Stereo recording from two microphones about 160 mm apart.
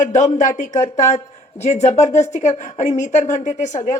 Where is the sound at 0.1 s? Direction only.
50° left (ahead or behind).